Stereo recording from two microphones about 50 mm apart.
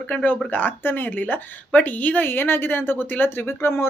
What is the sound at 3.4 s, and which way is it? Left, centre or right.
Speech, left.